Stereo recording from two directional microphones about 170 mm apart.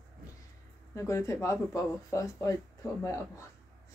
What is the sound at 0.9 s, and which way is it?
Speech, 20° left (ahead or behind).